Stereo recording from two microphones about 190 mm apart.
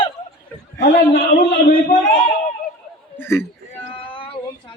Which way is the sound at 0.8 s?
50° left (ahead or behind).